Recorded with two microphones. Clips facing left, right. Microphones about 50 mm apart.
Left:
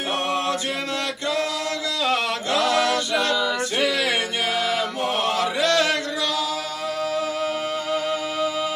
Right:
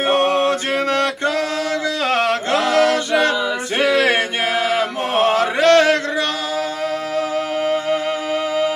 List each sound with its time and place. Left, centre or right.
0.1 s mantra: right
2.0 s a capella: right